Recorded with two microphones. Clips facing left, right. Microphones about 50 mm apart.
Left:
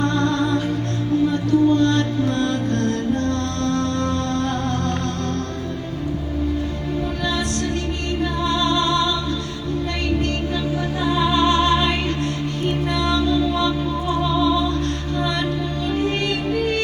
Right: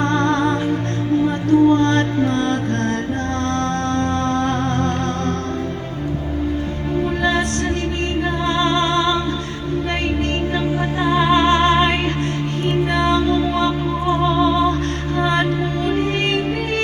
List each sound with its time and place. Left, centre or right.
0.0 s music: right
8.4 s music: right
11.0 s music: right
15.2 s music: right